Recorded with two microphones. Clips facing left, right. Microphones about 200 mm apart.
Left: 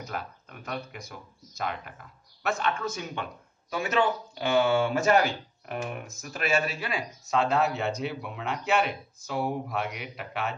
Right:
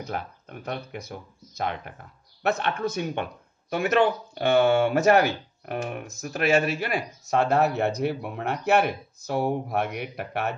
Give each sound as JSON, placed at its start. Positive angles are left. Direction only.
{"t": 0.0, "sound": "speech", "side_deg": -50}